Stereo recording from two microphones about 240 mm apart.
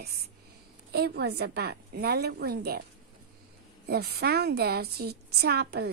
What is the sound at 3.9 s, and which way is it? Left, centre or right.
A woman's voice, right.